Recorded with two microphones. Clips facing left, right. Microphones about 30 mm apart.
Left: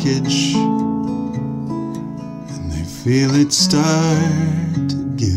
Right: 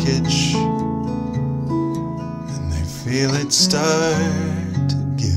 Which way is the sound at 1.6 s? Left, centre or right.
Right.